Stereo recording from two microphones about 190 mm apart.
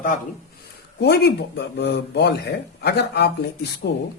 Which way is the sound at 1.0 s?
60° left (ahead or behind).